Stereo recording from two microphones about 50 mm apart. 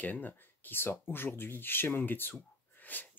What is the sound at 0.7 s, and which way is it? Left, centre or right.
Speech, left.